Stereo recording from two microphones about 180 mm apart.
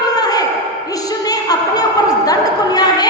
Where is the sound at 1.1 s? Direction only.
20° left (ahead or behind).